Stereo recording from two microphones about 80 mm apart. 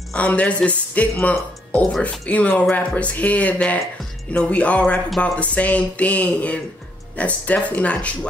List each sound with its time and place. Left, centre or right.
0.1 s speech: centre